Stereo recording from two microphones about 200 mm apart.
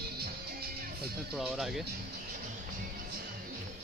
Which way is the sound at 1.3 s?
5° right (ahead or behind).